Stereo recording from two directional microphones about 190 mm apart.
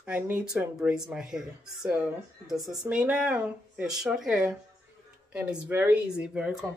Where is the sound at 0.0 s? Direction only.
5° right (ahead or behind).